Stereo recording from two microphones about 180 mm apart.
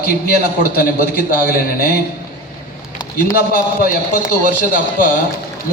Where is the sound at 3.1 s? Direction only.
55° left (ahead or behind).